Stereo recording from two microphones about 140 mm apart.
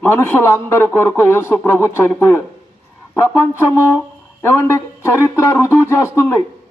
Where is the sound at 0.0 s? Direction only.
15° left (ahead or behind).